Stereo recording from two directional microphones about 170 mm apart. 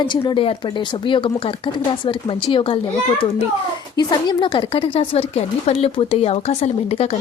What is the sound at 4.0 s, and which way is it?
Speech, 25° left (ahead or behind).